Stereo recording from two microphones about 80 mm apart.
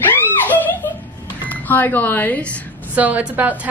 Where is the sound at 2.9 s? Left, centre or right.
Centre.